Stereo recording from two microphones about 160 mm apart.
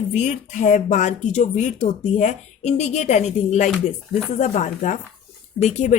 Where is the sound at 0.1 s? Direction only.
45° left (ahead or behind).